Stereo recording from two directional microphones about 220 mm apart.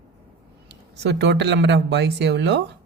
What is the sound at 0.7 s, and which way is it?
Speech, 50° right (ahead or behind).